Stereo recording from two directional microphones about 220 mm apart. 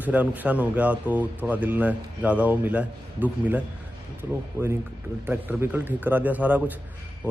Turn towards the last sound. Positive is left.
turn(degrees=-5)  # may be behind; listen again after turning